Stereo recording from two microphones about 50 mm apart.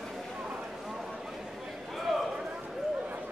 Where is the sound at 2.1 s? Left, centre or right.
Centre.